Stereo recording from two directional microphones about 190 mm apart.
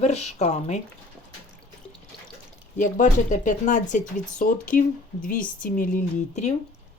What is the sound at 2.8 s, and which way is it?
A woman's voice, 40° left (ahead or behind).